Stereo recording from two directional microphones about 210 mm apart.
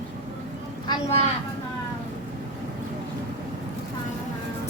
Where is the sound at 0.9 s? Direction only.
30° left (ahead or behind).